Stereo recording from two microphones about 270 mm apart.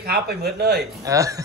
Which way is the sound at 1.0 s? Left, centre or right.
Centre.